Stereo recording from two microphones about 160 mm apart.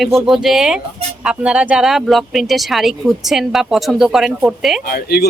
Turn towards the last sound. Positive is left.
turn(degrees=75)  # may be behind; listen again after turning